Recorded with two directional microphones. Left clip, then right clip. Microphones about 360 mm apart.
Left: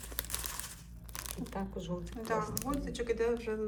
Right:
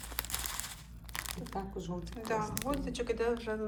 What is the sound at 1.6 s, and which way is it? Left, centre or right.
Speech, centre.